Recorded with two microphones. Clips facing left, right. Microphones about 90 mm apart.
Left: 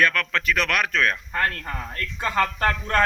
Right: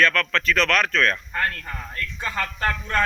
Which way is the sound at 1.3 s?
35° left (ahead or behind).